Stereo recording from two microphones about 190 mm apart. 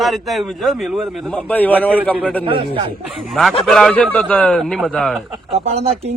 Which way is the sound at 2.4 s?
25° right (ahead or behind).